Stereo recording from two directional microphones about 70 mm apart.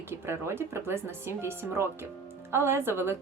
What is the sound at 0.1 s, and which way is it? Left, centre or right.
Speech, right.